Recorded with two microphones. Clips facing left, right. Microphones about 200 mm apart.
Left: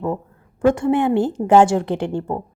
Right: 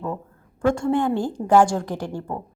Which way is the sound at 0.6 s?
20° left (ahead or behind).